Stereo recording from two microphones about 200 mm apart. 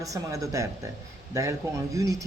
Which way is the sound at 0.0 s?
15° right (ahead or behind).